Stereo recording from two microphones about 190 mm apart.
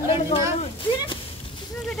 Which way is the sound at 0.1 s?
30° left (ahead or behind).